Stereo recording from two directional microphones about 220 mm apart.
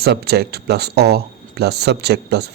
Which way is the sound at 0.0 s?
45° right (ahead or behind).